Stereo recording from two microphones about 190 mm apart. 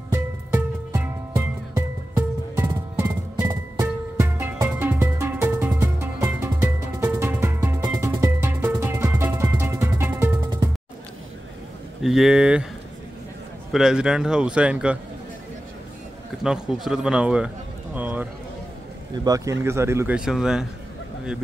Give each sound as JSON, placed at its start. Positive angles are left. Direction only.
{"t": 0.1, "sound": "music", "side_deg": -10}
{"t": 12.0, "sound": "a man's voice", "side_deg": 0}
{"t": 13.7, "sound": "a man's voice", "side_deg": 0}
{"t": 16.4, "sound": "a man's voice", "side_deg": -5}
{"t": 17.9, "sound": "a sound", "side_deg": -10}
{"t": 19.2, "sound": "speech", "side_deg": -20}